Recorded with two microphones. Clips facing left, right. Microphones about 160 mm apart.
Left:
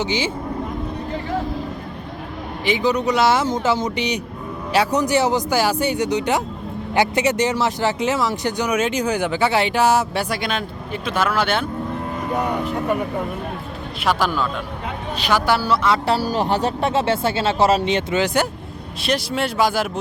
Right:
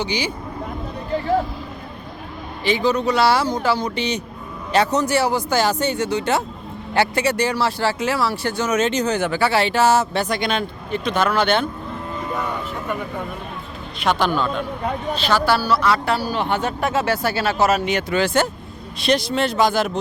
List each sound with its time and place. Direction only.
0.0 s speech: 20° left (ahead or behind)
2.6 s speech: 15° left (ahead or behind)
14.0 s a man's voice: 5° left (ahead or behind); by 16.1 s 20° left (ahead or behind)
16.1 s speech: 40° left (ahead or behind); by 18.4 s 20° left (ahead or behind)
19.0 s speech: 5° left (ahead or behind)